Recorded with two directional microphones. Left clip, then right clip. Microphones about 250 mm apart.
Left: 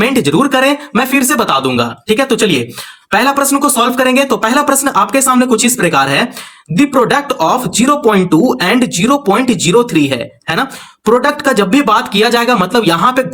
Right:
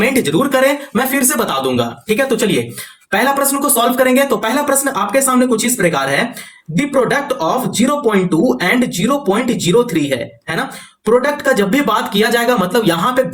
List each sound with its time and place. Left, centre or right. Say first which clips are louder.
0.0 s speech: left 3 dB; left